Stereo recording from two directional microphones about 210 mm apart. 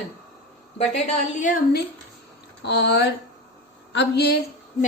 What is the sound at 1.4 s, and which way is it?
Speech, 40° left (ahead or behind).